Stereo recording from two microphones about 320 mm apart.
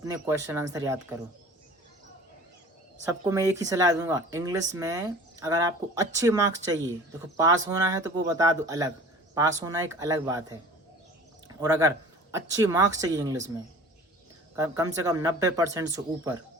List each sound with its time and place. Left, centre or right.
0.0 s speech: centre
3.0 s speech: centre
11.4 s speech: centre
14.5 s speech: centre